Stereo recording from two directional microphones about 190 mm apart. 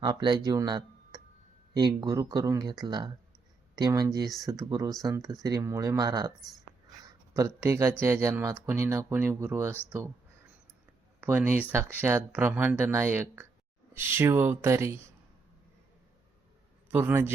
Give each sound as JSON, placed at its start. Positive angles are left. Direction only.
{"t": 0.0, "sound": "speech", "side_deg": -25}
{"t": 11.2, "sound": "speech", "side_deg": -10}
{"t": 16.9, "sound": "speech", "side_deg": -10}